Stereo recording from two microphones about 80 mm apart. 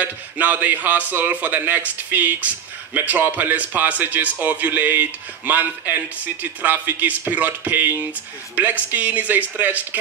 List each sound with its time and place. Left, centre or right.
0.0 s speech: right